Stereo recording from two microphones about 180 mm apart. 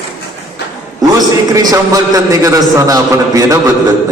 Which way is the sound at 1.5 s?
20° right (ahead or behind).